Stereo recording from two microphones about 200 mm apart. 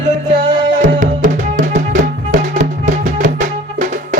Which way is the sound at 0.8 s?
40° right (ahead or behind).